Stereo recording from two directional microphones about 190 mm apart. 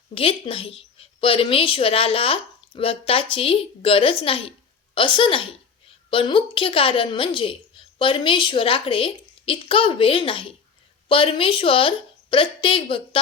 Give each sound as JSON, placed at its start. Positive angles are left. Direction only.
{"t": 0.1, "sound": "a woman's voice", "side_deg": 30}